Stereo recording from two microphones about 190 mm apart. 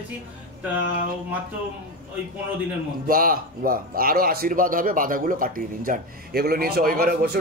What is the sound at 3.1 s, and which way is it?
Speech, 50° right (ahead or behind).